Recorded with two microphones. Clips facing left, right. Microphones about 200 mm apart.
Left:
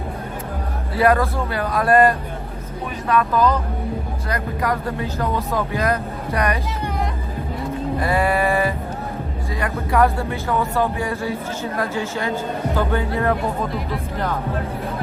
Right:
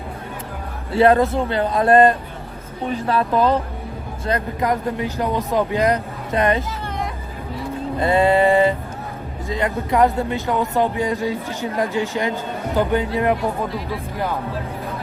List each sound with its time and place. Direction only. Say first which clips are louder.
0.9 s a man's voice: right 3 dB; 25° right (ahead or behind)
7.9 s a sound: right 5 dB; 25° right (ahead or behind)
9.5 s speech: right 3 dB; 20° right (ahead or behind)